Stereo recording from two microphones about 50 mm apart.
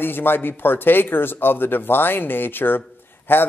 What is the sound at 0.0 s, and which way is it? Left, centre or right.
A man's voice, left.